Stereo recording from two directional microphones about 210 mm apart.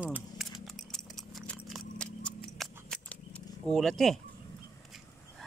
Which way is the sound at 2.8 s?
5° left (ahead or behind).